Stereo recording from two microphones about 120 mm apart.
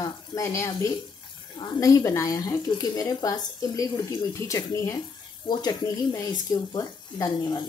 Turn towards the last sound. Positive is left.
turn(degrees=35)  # may be behind; listen again after turning